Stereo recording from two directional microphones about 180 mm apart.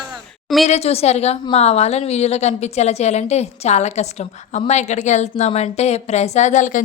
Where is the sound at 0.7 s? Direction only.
35° left (ahead or behind).